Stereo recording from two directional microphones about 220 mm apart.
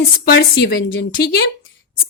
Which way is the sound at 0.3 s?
50° left (ahead or behind).